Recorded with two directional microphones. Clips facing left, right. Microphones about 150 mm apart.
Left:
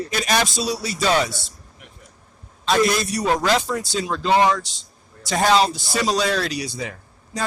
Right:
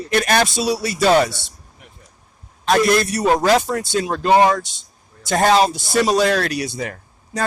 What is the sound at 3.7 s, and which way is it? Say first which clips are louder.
Speech: right 4 dB; 60° right (ahead or behind).